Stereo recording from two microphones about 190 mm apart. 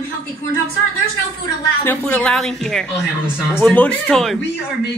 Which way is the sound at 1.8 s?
10° left (ahead or behind).